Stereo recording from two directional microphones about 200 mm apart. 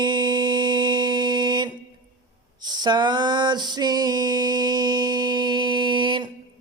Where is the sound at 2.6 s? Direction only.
20° right (ahead or behind).